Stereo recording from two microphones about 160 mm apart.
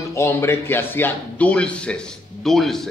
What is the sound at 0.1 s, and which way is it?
Speech, 15° left (ahead or behind).